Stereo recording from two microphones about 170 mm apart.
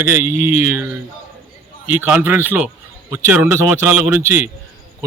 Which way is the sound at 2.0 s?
10° right (ahead or behind).